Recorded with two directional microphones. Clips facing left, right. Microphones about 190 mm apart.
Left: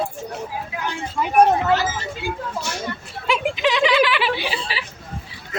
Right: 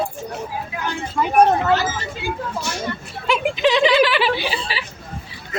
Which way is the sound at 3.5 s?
30° right (ahead or behind).